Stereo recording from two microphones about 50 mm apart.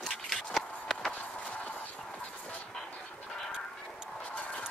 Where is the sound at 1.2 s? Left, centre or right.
Left.